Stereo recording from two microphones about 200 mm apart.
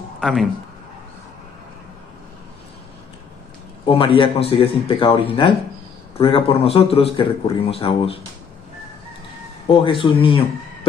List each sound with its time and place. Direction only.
0.2 s speech: centre (ahead or behind)
3.8 s a man's voice: 25° left (ahead or behind)
9.7 s speech: 25° left (ahead or behind)